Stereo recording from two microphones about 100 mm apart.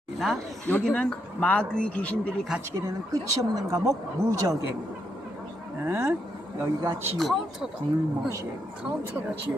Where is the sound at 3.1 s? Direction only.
40° right (ahead or behind).